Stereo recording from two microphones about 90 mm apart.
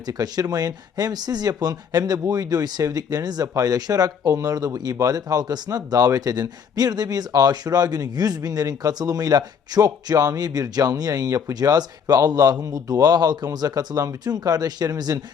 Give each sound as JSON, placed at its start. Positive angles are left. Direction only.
{"t": 0.1, "sound": "speech", "side_deg": -45}